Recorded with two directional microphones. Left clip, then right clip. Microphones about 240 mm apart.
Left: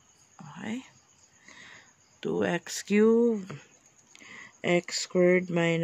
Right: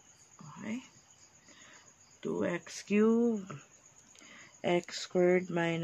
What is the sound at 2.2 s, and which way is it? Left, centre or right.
Speech, left.